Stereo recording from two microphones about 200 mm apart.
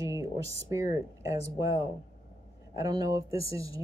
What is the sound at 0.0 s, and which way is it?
Speech, 15° right (ahead or behind).